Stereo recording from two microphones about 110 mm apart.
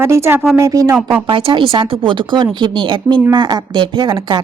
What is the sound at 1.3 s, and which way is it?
A woman's voice, 50° right (ahead or behind).